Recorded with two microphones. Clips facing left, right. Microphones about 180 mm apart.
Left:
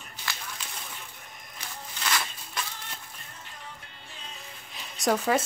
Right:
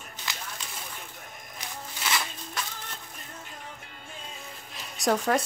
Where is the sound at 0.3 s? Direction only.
20° right (ahead or behind).